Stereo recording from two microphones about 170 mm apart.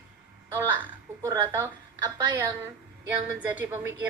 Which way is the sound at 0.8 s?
15° right (ahead or behind).